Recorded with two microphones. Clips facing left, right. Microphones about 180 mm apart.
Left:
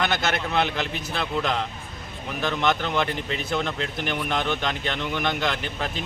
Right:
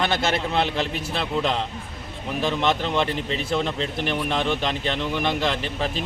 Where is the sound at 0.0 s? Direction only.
30° right (ahead or behind).